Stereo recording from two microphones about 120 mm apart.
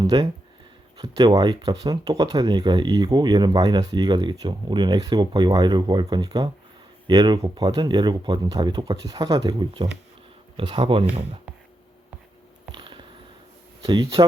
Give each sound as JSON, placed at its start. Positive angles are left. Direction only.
{"t": 0.0, "sound": "speech", "side_deg": -35}
{"t": 12.7, "sound": "a sound", "side_deg": -45}
{"t": 13.8, "sound": "speech", "side_deg": -35}